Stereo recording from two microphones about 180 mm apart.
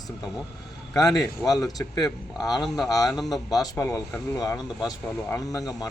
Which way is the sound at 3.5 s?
20° left (ahead or behind).